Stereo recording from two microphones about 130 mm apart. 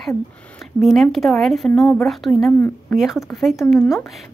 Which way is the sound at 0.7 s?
Centre (ahead or behind).